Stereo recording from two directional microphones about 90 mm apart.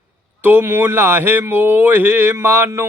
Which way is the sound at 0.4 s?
25° right (ahead or behind).